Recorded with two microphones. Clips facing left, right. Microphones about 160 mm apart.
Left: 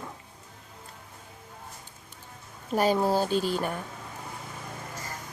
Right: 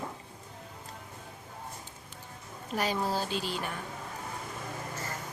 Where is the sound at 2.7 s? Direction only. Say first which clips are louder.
Left 7 dB; 45° left (ahead or behind).